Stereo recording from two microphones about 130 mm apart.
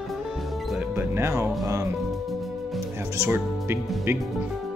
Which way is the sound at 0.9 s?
20° right (ahead or behind).